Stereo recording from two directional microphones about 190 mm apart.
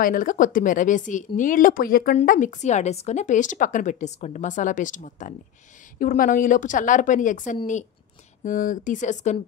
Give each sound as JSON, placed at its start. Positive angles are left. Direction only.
{"t": 0.0, "sound": "a woman's voice", "side_deg": 45}